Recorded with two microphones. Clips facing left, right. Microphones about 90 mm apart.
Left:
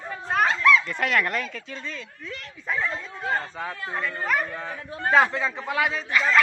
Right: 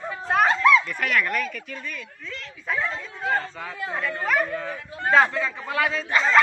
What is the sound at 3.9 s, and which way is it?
Speech, centre (ahead or behind).